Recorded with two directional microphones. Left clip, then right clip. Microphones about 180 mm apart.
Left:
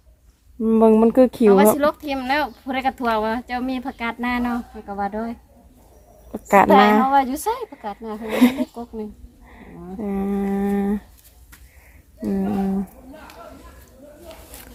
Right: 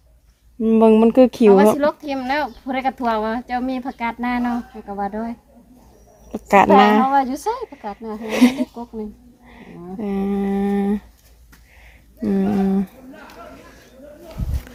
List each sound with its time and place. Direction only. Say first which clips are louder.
0.6 s speech: right 1 dB; centre (ahead or behind)
1.8 s speech: right 1 dB; 15° right (ahead or behind)
6.3 s speech: right 1 dB; 5° right (ahead or behind)
6.7 s speech: right 1 dB; 15° right (ahead or behind)
9.5 s a sound: right 2 dB; 10° right (ahead or behind)
12.2 s speech: right 4 dB; 15° right (ahead or behind)